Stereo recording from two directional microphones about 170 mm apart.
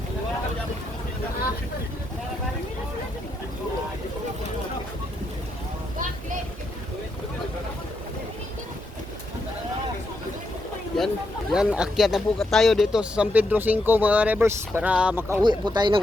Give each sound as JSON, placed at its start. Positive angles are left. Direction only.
{"t": 10.9, "sound": "a sound", "side_deg": 5}
{"t": 11.5, "sound": "speech", "side_deg": -5}
{"t": 15.4, "sound": "speech", "side_deg": -25}